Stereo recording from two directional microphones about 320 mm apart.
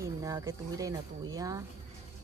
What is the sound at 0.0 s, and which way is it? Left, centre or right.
Speech, centre.